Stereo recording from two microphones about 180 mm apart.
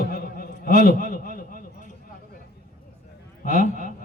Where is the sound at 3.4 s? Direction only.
45° left (ahead or behind).